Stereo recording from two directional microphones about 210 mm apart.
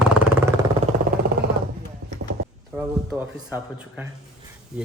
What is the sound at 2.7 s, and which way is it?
Speech, 10° right (ahead or behind).